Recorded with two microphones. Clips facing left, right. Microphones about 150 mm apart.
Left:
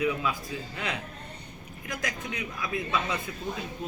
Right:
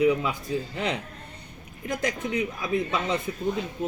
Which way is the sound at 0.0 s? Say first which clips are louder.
Right 6 dB; 20° right (ahead or behind).